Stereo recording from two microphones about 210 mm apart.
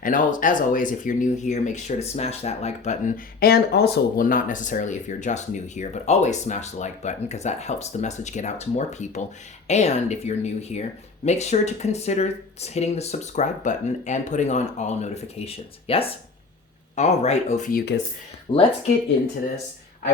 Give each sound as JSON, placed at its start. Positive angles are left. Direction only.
{"t": 0.0, "sound": "speech", "side_deg": 40}
{"t": 18.5, "sound": "speech", "side_deg": 25}